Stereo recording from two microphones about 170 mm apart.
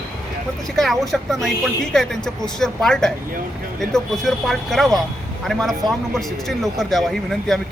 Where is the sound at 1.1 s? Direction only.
Centre (ahead or behind).